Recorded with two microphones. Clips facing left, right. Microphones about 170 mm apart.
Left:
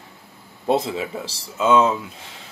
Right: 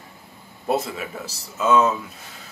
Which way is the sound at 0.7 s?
25° left (ahead or behind).